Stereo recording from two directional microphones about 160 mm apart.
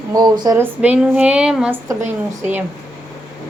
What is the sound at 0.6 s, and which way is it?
Speech, 10° right (ahead or behind).